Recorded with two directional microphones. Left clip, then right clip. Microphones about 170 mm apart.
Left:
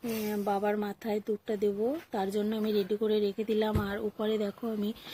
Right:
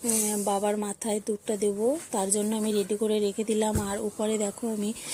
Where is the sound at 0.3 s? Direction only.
15° right (ahead or behind).